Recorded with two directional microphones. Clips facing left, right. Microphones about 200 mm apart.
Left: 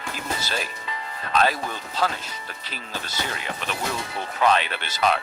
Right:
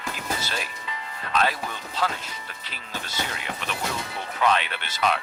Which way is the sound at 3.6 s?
40° left (ahead or behind).